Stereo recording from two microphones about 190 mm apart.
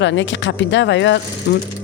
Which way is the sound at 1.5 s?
60° left (ahead or behind).